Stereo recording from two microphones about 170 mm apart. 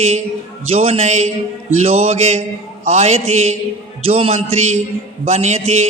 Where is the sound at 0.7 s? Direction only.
35° right (ahead or behind).